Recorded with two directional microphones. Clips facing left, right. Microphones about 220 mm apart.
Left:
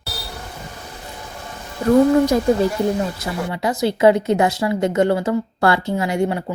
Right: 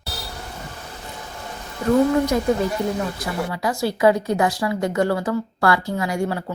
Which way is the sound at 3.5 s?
20° left (ahead or behind).